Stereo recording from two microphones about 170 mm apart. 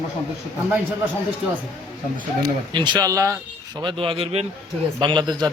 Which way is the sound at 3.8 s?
30° right (ahead or behind).